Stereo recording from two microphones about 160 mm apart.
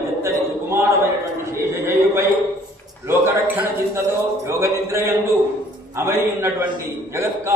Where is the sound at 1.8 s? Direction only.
15° right (ahead or behind).